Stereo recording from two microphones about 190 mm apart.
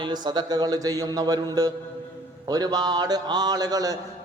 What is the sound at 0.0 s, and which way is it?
A man's voice, 20° right (ahead or behind).